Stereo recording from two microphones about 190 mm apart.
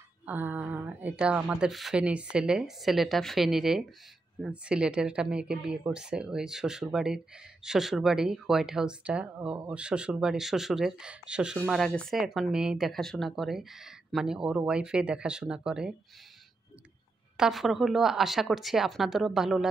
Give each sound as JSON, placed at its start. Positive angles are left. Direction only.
{"t": 0.2, "sound": "speech", "side_deg": -10}
{"t": 17.4, "sound": "speech", "side_deg": 0}